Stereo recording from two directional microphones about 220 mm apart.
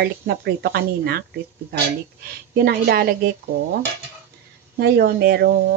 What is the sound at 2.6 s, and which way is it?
Speech, 45° right (ahead or behind).